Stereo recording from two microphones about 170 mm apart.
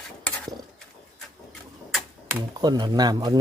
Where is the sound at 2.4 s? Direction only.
25° right (ahead or behind).